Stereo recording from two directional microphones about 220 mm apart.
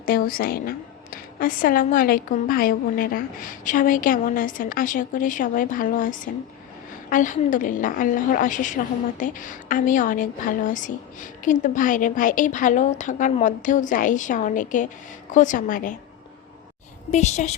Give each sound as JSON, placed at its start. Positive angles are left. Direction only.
{"t": 0.0, "sound": "a woman's voice", "side_deg": 40}
{"t": 17.1, "sound": "a woman's voice", "side_deg": 30}